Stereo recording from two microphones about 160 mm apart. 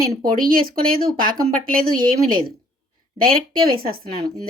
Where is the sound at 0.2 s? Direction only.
65° right (ahead or behind).